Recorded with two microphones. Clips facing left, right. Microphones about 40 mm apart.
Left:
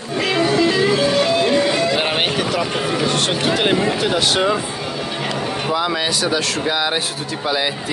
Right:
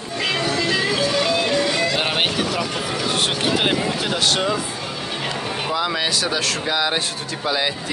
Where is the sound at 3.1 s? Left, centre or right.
Centre.